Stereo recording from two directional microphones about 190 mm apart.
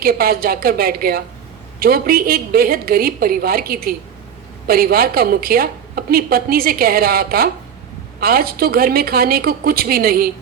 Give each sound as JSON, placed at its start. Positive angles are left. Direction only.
{"t": 0.0, "sound": "a woman's voice", "side_deg": -50}